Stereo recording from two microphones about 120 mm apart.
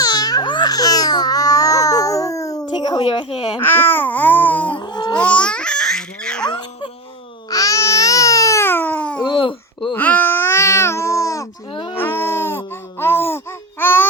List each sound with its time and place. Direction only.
0.0 s babbling: 35° left (ahead or behind); by 3.6 s 50° left (ahead or behind)
3.6 s babbling: 20° left (ahead or behind)
4.7 s babbling: 40° left (ahead or behind)
5.1 s babbling: 10° left (ahead or behind)
6.5 s music: 40° left (ahead or behind)
7.5 s baby cry: 30° left (ahead or behind); by 9.2 s 10° left (ahead or behind)
9.2 s babbling: 45° left (ahead or behind)
9.9 s baby cry: 15° left (ahead or behind)
11.7 s baby cry: 45° left (ahead or behind)
11.9 s baby cry: 20° left (ahead or behind)